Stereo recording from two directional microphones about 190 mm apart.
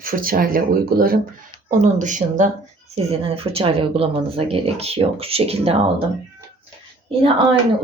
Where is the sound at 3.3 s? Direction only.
30° right (ahead or behind).